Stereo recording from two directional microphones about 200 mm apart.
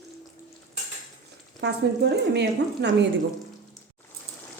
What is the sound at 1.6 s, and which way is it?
Speech, 60° right (ahead or behind).